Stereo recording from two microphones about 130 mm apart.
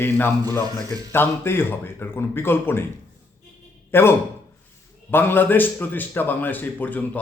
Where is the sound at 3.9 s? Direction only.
20° left (ahead or behind).